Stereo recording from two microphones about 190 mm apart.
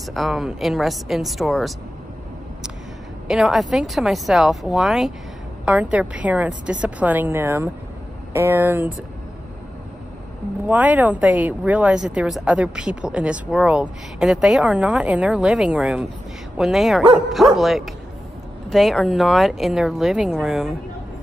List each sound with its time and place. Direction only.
0.1 s speech: centre (ahead or behind)
3.3 s a woman's voice: 5° right (ahead or behind)
10.7 s speech: 10° right (ahead or behind)